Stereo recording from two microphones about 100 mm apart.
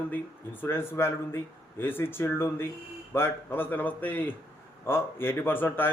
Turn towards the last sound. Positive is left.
turn(degrees=20)  # may be behind; listen again after turning